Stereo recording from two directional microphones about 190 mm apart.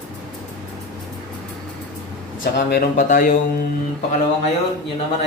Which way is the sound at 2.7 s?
50° left (ahead or behind).